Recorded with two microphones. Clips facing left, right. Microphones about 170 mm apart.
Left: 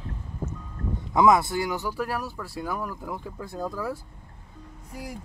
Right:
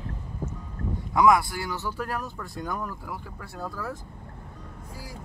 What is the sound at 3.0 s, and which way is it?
Speech, 20° left (ahead or behind).